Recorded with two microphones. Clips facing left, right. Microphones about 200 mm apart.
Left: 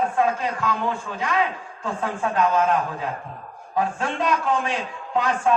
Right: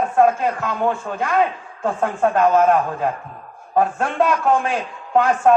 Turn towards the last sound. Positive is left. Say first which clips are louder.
# right 6 dB
turn(degrees=-55)  # may be behind; listen again after turning